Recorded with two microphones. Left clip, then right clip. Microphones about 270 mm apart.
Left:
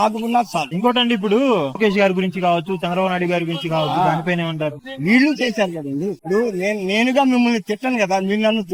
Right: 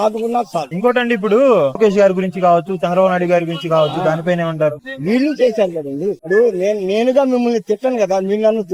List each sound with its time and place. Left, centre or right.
0.0 s speech: left
0.8 s a man's voice: centre
5.0 s speech: left